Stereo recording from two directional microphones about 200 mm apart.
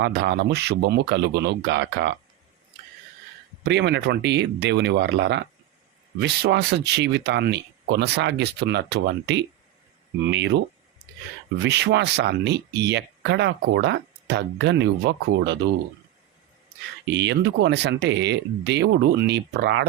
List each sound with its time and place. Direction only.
0.0 s speech: 55° right (ahead or behind)
3.6 s speech: 60° right (ahead or behind)
11.6 s speech: 60° right (ahead or behind)
17.2 s speech: 60° right (ahead or behind)